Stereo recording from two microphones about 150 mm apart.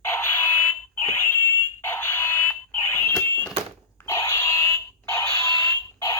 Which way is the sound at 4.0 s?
20° left (ahead or behind).